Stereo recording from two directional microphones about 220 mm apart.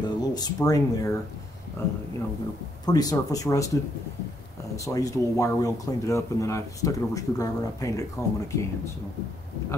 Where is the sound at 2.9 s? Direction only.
15° left (ahead or behind).